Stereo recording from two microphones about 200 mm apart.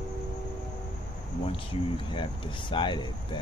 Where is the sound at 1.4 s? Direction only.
25° left (ahead or behind).